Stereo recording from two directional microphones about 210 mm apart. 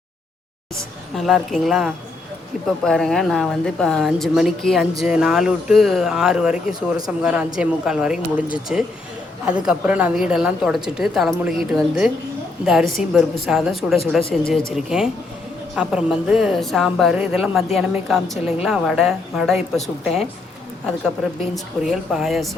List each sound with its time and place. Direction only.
0.8 s speech: centre (ahead or behind)
6.7 s speech: 20° right (ahead or behind)
7.2 s speech: 5° right (ahead or behind)
21.5 s speech: centre (ahead or behind)